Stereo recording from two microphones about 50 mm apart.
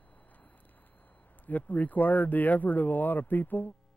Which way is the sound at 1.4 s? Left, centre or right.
Left.